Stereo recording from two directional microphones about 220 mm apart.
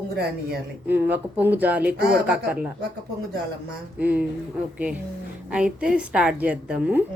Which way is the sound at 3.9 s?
5° right (ahead or behind).